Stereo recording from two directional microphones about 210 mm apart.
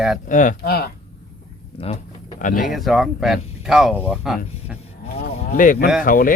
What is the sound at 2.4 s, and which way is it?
Speech, 40° left (ahead or behind).